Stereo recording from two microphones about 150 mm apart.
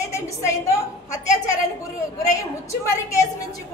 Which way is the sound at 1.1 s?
20° left (ahead or behind).